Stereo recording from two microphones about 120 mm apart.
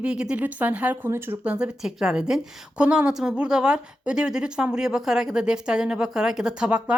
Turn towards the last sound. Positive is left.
turn(degrees=-5)  # may be behind; listen again after turning